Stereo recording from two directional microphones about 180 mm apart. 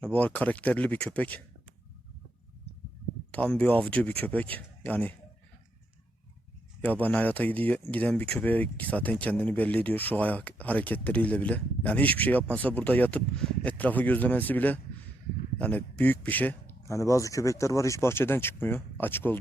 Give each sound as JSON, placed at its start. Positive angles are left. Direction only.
{"t": 0.0, "sound": "speech", "side_deg": 10}
{"t": 3.3, "sound": "speech", "side_deg": 5}
{"t": 7.0, "sound": "speech", "side_deg": 10}